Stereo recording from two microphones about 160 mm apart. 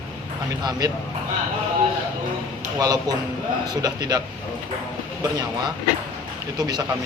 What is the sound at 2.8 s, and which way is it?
Speech, 25° right (ahead or behind).